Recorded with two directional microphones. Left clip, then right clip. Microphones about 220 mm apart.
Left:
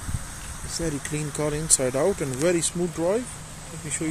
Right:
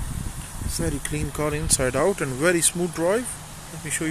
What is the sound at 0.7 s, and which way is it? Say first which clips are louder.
Speech: right 1 dB; centre (ahead or behind).